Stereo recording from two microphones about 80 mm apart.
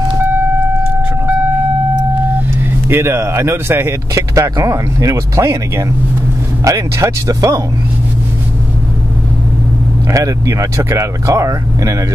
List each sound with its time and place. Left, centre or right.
2.9 s speech: right
10.1 s speech: right